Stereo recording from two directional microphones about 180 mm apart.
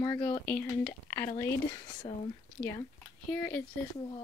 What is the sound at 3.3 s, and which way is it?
Speech, 10° left (ahead or behind).